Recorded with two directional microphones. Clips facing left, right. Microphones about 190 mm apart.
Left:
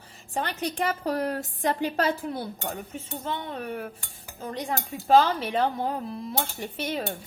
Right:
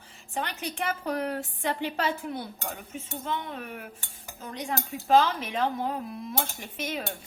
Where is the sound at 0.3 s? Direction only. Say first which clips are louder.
Left 4 dB; 35° left (ahead or behind).